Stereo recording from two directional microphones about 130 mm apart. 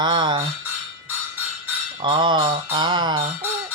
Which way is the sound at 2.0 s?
40° right (ahead or behind).